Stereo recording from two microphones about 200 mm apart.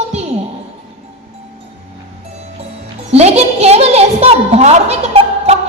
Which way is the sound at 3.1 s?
30° right (ahead or behind).